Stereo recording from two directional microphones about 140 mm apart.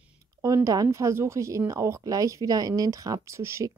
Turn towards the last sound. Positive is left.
turn(degrees=-20)  # may be behind; listen again after turning